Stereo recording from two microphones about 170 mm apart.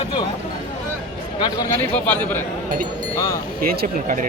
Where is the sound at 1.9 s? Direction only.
10° left (ahead or behind).